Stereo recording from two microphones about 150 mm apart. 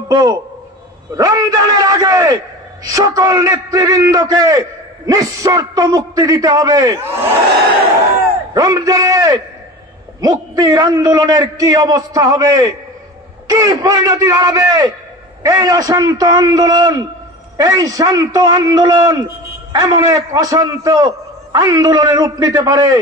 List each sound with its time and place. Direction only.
0.1 s a man's voice: 25° right (ahead or behind)
8.5 s a man's voice: 25° right (ahead or behind)